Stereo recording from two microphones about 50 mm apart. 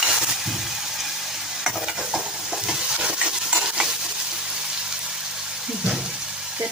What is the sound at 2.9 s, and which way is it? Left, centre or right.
Stir, centre.